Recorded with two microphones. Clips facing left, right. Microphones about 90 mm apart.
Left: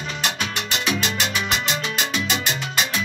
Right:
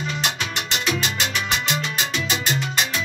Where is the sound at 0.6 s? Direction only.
10° right (ahead or behind).